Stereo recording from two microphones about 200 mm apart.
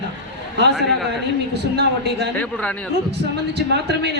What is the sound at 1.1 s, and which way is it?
A woman's voice, 55° right (ahead or behind).